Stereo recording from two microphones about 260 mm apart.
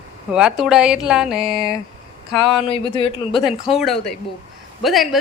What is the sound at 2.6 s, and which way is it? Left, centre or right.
Speech, left.